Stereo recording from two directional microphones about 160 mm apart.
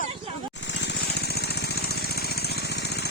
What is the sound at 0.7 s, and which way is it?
Jackhammer, 90° left.